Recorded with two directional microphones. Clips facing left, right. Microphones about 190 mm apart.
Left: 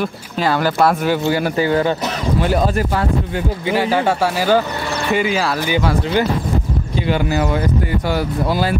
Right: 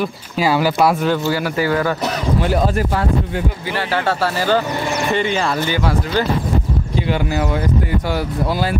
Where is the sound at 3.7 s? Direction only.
15° left (ahead or behind).